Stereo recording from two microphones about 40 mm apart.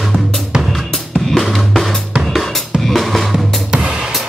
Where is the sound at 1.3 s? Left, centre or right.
Centre.